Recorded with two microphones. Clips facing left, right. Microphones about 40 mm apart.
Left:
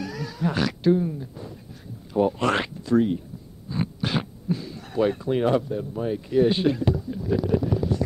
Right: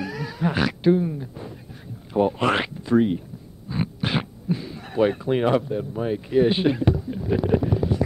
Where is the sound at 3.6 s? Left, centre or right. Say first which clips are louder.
Right 1 dB; right.